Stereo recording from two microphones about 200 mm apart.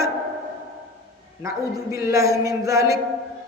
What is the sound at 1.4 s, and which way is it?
A man's voice, 15° right (ahead or behind).